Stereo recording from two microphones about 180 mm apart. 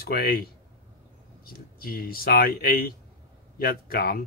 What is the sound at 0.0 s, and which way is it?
Speech, 55° left (ahead or behind).